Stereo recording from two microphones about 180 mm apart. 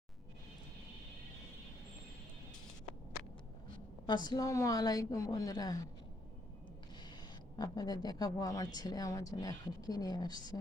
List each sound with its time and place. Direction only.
4.0 s speech: 25° left (ahead or behind)
7.5 s speech: 20° left (ahead or behind)